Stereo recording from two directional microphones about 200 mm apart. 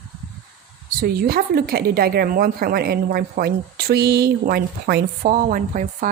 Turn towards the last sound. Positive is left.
turn(degrees=-40)  # may be behind; listen again after turning